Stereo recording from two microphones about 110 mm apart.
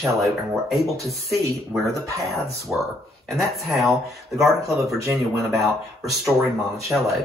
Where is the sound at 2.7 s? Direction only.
10° right (ahead or behind).